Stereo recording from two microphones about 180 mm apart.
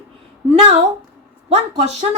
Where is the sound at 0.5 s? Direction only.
35° right (ahead or behind).